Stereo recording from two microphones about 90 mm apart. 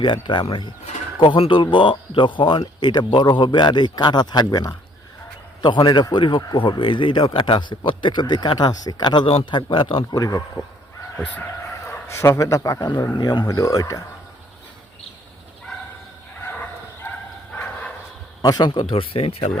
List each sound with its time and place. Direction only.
0.0 s speech: 60° left (ahead or behind)
5.6 s speech: 55° left (ahead or behind)
9.2 s speech: 70° left (ahead or behind)
10.2 s speech: 45° left (ahead or behind)
11.9 s a man's voice: 25° left (ahead or behind)
12.8 s speech: 50° left (ahead or behind)
13.5 s speech: 40° left (ahead or behind)
16.4 s bow-wow: 25° left (ahead or behind)
18.4 s speech: 45° left (ahead or behind)
18.7 s speech: 75° left (ahead or behind)